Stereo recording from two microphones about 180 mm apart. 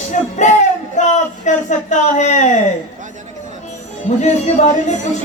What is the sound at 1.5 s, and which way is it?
A man's voice, 40° left (ahead or behind).